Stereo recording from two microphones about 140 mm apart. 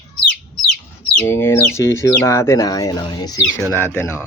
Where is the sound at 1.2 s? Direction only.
15° left (ahead or behind).